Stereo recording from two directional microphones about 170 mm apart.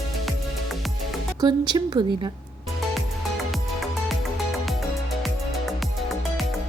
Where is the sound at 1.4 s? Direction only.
25° right (ahead or behind).